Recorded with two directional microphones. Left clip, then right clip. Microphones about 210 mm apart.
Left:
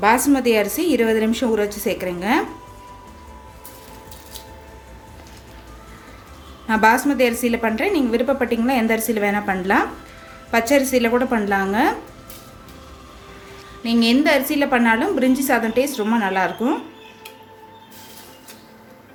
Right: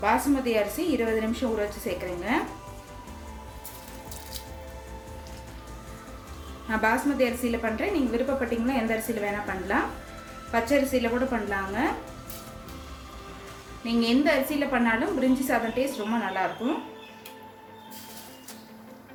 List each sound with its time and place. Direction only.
0.0 s a woman's voice: 45° left (ahead or behind)
6.7 s a woman's voice: 45° left (ahead or behind)
13.8 s a woman's voice: 45° left (ahead or behind)